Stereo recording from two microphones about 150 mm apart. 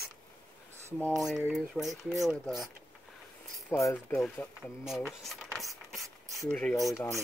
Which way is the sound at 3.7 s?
20° left (ahead or behind).